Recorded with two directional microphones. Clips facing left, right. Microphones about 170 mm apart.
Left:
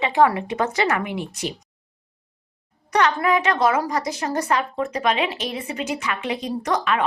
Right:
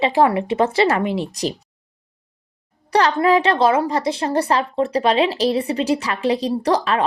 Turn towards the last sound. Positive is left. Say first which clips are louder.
# right 4 dB
turn(degrees=-35)  # may be behind; listen again after turning